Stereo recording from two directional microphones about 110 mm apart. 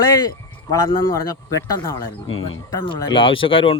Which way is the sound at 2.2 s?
55° left (ahead or behind).